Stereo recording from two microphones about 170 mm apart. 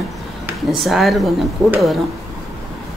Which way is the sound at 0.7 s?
Centre (ahead or behind).